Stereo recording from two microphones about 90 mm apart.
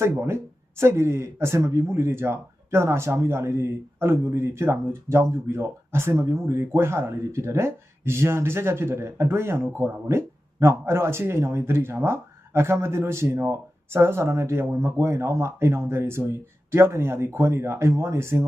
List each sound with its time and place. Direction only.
0.0 s speech: 30° right (ahead or behind)